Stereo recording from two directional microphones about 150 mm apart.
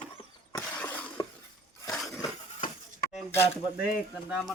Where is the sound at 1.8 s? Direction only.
Centre (ahead or behind).